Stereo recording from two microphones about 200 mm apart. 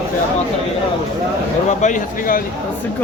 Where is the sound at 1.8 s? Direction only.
40° left (ahead or behind).